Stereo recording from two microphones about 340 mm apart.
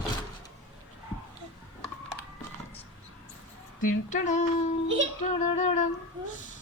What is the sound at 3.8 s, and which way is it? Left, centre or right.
Female singing, left.